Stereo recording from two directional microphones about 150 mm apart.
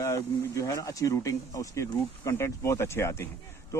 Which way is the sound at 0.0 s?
20° left (ahead or behind).